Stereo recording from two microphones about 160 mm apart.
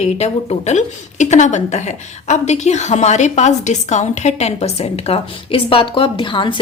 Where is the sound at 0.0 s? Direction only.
45° left (ahead or behind).